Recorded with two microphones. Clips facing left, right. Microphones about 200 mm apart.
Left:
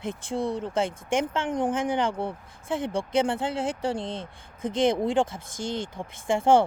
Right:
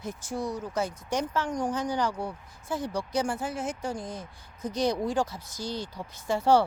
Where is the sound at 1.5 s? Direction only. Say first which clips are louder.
Left 4 dB; 55° left (ahead or behind).